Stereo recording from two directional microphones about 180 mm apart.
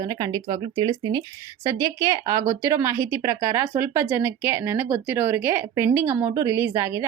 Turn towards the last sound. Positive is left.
turn(degrees=-20)  # may be behind; listen again after turning